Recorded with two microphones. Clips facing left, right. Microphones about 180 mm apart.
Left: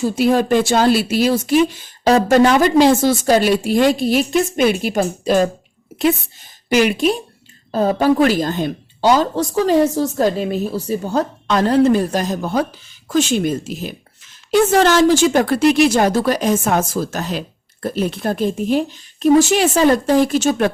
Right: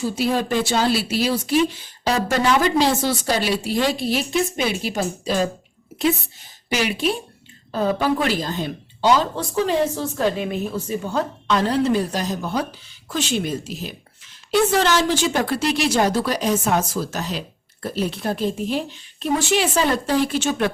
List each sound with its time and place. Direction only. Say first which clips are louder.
0.2 s a woman's voice: left 7 dB; 50° left (ahead or behind)
6.7 s a woman's voice: left 7 dB; 50° left (ahead or behind)